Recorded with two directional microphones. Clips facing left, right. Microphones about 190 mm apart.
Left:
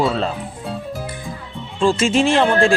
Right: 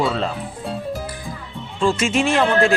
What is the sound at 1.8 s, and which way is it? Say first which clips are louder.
Speech: left 3 dB; 30° left (ahead or behind).